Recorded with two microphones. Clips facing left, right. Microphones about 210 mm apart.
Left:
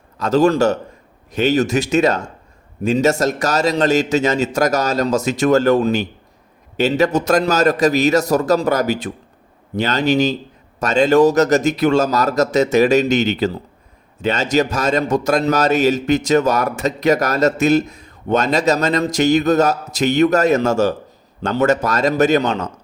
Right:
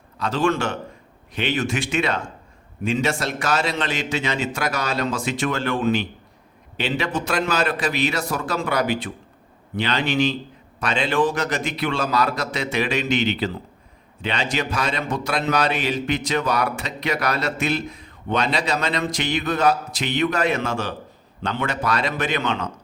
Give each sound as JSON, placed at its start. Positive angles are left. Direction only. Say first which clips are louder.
{"t": 0.2, "sound": "a man's voice", "louder": "left 8 dB", "side_deg": 40}